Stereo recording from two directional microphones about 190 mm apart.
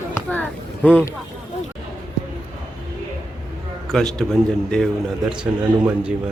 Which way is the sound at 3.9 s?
Centre (ahead or behind).